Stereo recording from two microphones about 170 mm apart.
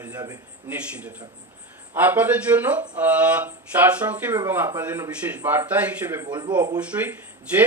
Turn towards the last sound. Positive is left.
turn(degrees=-10)  # may be behind; listen again after turning